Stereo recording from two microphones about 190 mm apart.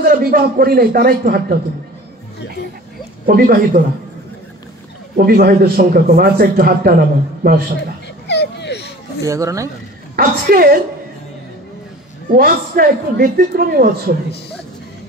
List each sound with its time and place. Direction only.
0.0 s a man's voice: 50° right (ahead or behind)
3.3 s a man's voice: 50° right (ahead or behind)
5.1 s a man's voice: 55° right (ahead or behind)
8.3 s a sound: 65° left (ahead or behind)
9.2 s speech: 15° right (ahead or behind)
10.1 s a man's voice: 50° right (ahead or behind)
12.4 s a man's voice: 50° right (ahead or behind)